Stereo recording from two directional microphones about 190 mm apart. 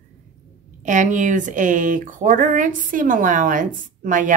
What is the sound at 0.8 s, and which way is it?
A woman's voice, 40° right (ahead or behind).